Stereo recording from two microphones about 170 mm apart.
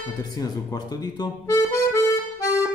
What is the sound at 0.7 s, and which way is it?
Speech, 20° left (ahead or behind).